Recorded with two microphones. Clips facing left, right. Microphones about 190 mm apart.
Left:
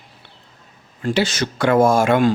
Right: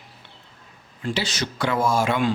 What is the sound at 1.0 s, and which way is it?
Speech, 50° left (ahead or behind).